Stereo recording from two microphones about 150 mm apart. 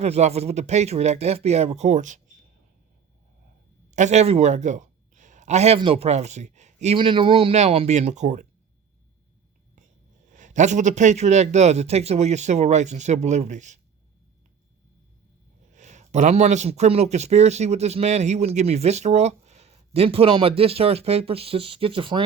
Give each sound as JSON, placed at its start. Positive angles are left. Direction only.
{"t": 0.0, "sound": "speech", "side_deg": -45}
{"t": 3.9, "sound": "speech", "side_deg": -50}
{"t": 6.9, "sound": "speech", "side_deg": -35}
{"t": 10.2, "sound": "speech", "side_deg": -55}
{"t": 15.7, "sound": "speech", "side_deg": -50}